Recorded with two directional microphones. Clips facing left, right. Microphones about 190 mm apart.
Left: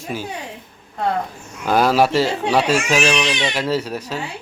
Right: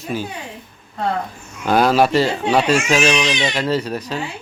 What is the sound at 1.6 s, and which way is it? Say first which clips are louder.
Speech: right 1 dB; 10° left (ahead or behind).